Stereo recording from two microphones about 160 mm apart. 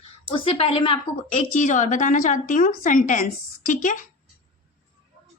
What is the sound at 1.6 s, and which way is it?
A woman's voice, 50° left (ahead or behind).